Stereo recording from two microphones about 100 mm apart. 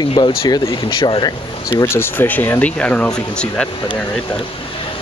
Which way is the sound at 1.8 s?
25° left (ahead or behind).